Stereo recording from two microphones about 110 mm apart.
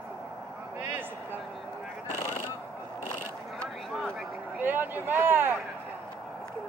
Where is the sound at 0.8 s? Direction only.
15° right (ahead or behind).